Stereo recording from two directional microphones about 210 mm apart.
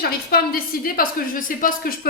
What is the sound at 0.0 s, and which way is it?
A woman's voice, 45° left (ahead or behind).